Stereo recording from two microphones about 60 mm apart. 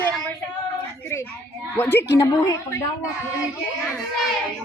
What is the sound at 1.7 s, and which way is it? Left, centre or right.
Speech, left.